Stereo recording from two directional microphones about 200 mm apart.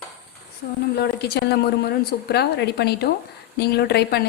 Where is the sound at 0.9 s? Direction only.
55° left (ahead or behind).